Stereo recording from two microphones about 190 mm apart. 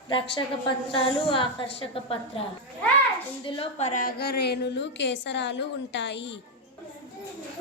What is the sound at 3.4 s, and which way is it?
A woman's voice, 25° left (ahead or behind).